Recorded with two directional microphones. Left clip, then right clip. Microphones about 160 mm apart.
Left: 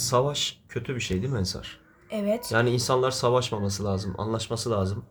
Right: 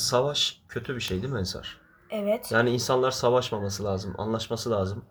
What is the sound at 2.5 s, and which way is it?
Speech, 5° left (ahead or behind).